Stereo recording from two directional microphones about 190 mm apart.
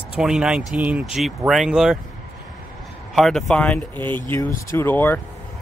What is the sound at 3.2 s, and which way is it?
Speech, centre (ahead or behind).